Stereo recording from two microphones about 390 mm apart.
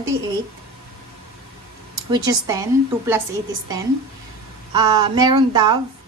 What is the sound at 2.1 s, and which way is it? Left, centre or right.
Speech, centre.